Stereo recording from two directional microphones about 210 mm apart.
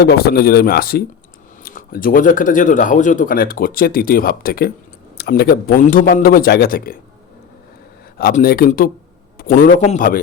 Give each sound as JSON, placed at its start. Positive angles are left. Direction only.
{"t": 0.0, "sound": "a man's voice", "side_deg": 50}
{"t": 8.2, "sound": "a man's voice", "side_deg": 45}